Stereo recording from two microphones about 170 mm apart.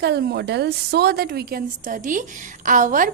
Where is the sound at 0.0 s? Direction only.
75° right (ahead or behind).